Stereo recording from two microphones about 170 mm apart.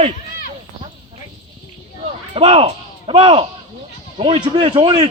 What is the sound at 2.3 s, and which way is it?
A man's voice, 35° right (ahead or behind).